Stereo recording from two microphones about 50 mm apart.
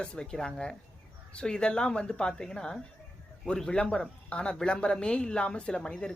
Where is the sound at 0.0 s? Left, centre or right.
Centre.